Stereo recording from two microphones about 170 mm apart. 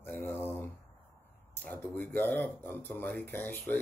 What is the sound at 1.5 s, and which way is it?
Speech, 10° left (ahead or behind).